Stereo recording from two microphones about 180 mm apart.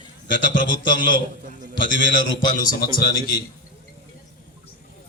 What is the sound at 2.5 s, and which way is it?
Speech, 50° left (ahead or behind).